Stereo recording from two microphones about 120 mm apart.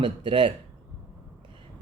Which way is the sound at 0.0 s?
45° right (ahead or behind).